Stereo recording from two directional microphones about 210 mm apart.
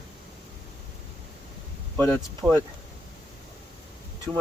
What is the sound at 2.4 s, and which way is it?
Speech, centre (ahead or behind).